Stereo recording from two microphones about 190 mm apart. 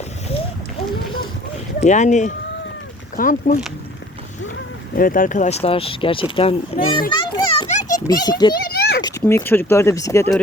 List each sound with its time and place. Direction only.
1.8 s speech: 40° left (ahead or behind)
4.9 s speech: 45° left (ahead or behind); by 7.0 s 30° left (ahead or behind)
7.1 s children playing: 25° left (ahead or behind)
7.7 s a sound: 40° left (ahead or behind)
8.0 s speech: 20° left (ahead or behind)
8.7 s a sound: 60° left (ahead or behind)
9.2 s speech: 10° left (ahead or behind)